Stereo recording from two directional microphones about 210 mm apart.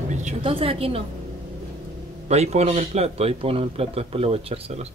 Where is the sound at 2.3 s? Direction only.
30° right (ahead or behind).